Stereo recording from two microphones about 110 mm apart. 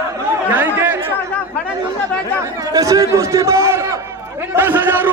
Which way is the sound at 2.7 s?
30° right (ahead or behind).